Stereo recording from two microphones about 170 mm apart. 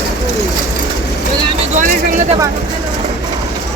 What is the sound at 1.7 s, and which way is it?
Vehicle, 50° right (ahead or behind).